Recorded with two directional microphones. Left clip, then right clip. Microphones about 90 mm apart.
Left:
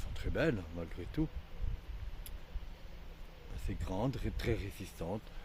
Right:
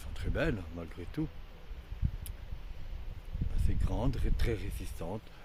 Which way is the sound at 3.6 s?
40° right (ahead or behind).